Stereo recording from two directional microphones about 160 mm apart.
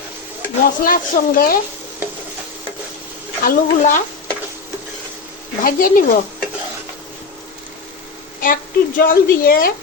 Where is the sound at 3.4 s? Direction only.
55° left (ahead or behind).